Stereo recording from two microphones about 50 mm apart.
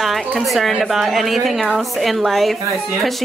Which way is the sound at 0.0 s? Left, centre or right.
Centre.